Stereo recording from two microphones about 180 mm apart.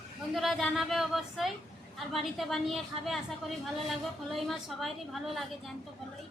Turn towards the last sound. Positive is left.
turn(degrees=0)  # may be behind; listen again after turning